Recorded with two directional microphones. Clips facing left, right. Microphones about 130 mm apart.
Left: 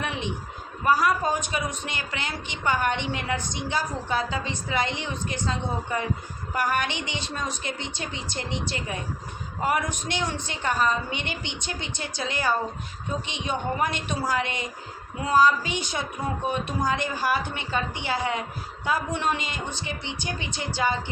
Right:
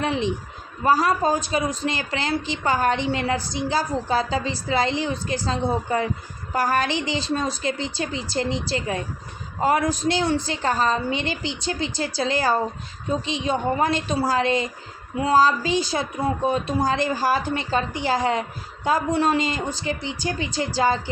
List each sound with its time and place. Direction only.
0.0 s a man's voice: 30° right (ahead or behind)